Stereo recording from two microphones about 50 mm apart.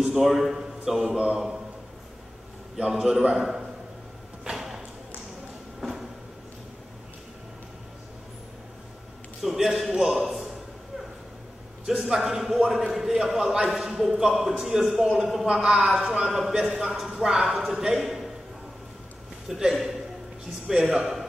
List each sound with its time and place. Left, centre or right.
0.1 s a man's voice: centre
1.0 s a man's voice: centre
2.9 s a man's voice: centre
4.5 s a sound: centre
9.4 s a man's voice: centre
11.8 s a man's voice: centre
19.4 s a man's voice: centre